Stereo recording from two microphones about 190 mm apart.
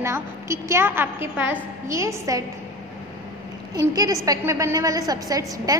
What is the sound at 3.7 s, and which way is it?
A woman's voice, 20° right (ahead or behind).